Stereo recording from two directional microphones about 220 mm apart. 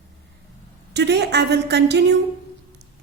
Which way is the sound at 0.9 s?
50° right (ahead or behind).